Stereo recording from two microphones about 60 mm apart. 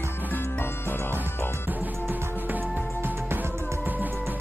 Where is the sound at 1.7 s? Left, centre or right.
Right.